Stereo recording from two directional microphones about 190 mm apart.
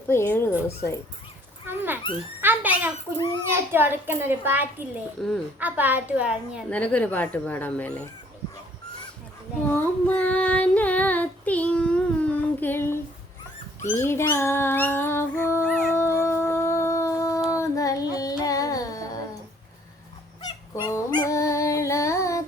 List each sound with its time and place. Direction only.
0.1 s child singing: 10° left (ahead or behind)
1.6 s dog: 10° right (ahead or behind)
2.4 s a child's voice: 10° right (ahead or behind)
6.7 s child singing: 5° left (ahead or behind)
9.6 s child singing: 10° left (ahead or behind)
15.7 s dog: 15° left (ahead or behind)
17.5 s child singing: 15° left (ahead or behind)
20.4 s dog: 20° left (ahead or behind)